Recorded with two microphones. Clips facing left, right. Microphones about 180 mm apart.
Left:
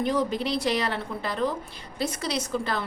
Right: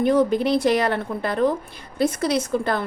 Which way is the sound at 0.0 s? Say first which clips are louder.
Right 7 dB; 55° right (ahead or behind).